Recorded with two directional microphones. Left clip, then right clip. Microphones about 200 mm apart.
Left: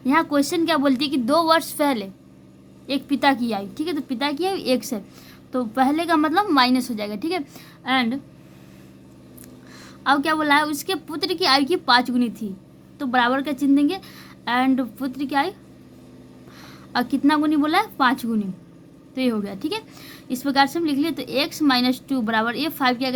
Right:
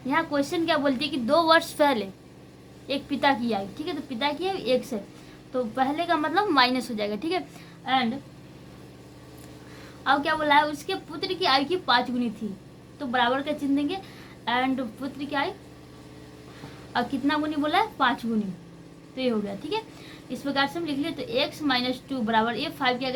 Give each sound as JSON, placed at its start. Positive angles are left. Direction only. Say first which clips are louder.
{"t": 0.1, "sound": "a woman's voice", "louder": "left 5 dB", "side_deg": 30}
{"t": 10.0, "sound": "a woman's voice", "louder": "left 4 dB", "side_deg": 25}
{"t": 16.6, "sound": "a woman's voice", "louder": "left 3 dB", "side_deg": 30}